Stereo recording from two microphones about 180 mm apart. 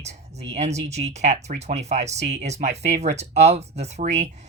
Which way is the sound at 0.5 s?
40° right (ahead or behind).